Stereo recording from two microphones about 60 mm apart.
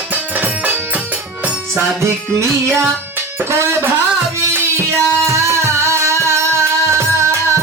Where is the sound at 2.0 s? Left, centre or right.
Right.